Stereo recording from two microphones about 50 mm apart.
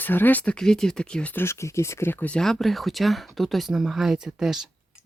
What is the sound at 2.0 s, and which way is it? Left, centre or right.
Speech, left.